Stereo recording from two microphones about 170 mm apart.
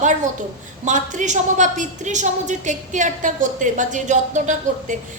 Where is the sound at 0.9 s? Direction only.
45° right (ahead or behind).